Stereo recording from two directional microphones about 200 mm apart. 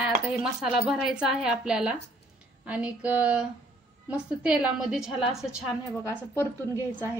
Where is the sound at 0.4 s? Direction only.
5° right (ahead or behind).